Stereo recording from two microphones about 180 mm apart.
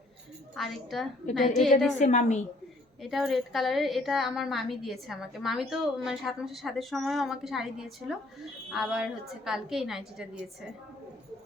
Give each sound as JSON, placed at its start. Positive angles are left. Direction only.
{"t": 0.5, "sound": "a woman's voice", "side_deg": 0}
{"t": 2.0, "sound": "a woman's voice", "side_deg": 40}
{"t": 3.0, "sound": "a woman's voice", "side_deg": 0}